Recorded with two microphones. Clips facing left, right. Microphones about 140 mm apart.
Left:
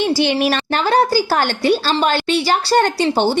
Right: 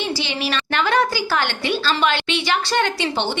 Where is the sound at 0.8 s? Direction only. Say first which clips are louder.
Left 4 dB; 35° left (ahead or behind).